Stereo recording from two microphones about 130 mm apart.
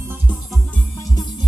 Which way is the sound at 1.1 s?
35° left (ahead or behind).